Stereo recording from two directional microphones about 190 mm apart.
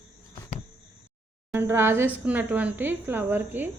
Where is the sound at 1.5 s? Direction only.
10° right (ahead or behind).